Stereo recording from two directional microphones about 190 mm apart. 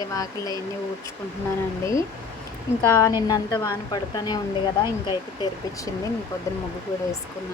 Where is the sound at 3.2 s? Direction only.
15° left (ahead or behind).